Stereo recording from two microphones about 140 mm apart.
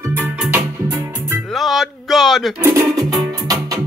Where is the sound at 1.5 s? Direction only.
Centre (ahead or behind).